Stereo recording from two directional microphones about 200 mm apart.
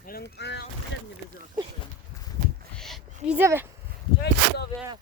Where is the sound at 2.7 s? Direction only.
Centre (ahead or behind).